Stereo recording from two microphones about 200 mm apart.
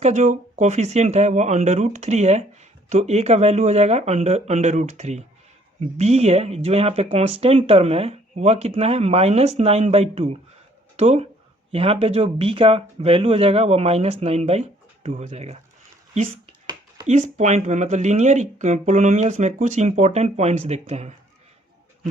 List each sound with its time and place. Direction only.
0.0 s speech: 35° right (ahead or behind)
17.1 s speech: 40° right (ahead or behind)